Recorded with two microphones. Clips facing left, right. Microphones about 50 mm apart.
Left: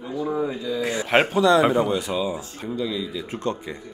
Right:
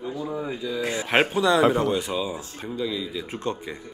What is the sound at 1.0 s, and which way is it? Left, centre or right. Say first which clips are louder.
Speech: left 3 dB; centre.